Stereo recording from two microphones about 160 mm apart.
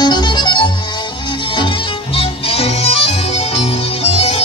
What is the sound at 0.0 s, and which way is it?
Music, 25° left (ahead or behind).